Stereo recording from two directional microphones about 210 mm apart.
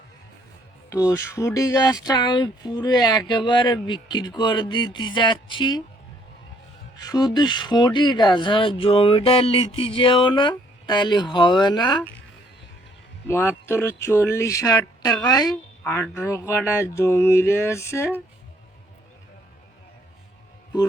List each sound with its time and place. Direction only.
0.9 s speech: 15° left (ahead or behind)
6.9 s speech: 20° left (ahead or behind)
13.2 s a sound: 10° left (ahead or behind)